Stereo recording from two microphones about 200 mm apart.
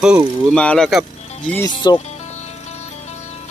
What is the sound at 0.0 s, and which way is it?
Speech, 5° right (ahead or behind).